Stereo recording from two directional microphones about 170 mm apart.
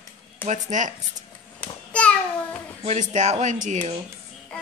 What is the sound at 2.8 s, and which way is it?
Speech, 45° right (ahead or behind).